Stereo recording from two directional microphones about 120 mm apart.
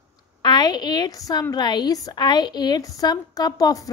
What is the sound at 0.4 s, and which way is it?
A woman's voice, 35° left (ahead or behind).